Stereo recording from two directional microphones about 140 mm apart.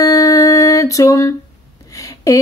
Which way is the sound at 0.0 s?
25° left (ahead or behind).